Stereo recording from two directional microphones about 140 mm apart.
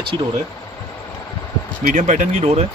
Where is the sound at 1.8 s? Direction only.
60° right (ahead or behind).